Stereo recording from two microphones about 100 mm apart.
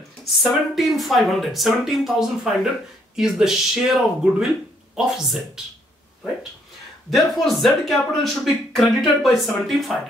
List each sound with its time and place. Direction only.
0.2 s speech: centre (ahead or behind)
7.1 s speech: centre (ahead or behind)